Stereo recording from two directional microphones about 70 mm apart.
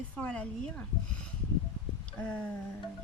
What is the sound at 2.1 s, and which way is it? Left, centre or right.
Speech, left.